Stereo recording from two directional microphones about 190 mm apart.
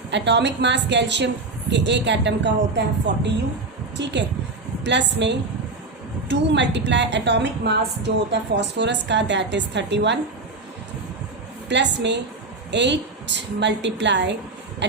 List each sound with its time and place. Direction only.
0.1 s a woman's voice: 65° right (ahead or behind)
11.7 s a woman's voice: 65° right (ahead or behind)